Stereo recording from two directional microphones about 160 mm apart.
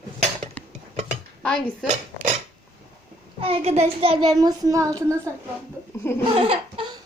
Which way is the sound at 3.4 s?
35° right (ahead or behind).